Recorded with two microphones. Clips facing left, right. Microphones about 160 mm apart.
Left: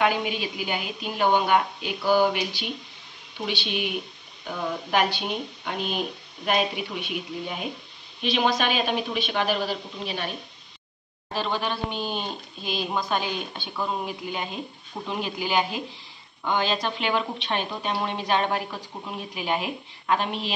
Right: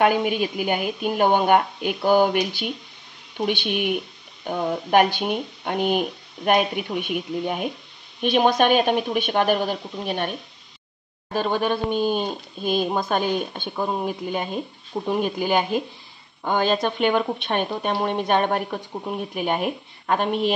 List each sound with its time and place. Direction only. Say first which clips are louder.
0.0 s speech: right 5 dB; 50° right (ahead or behind)
11.3 s speech: right 6 dB; 50° right (ahead or behind)